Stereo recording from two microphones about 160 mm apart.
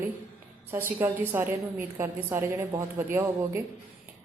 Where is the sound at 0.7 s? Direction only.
15° right (ahead or behind).